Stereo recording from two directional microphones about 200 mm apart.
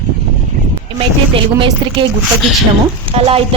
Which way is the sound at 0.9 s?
25° right (ahead or behind).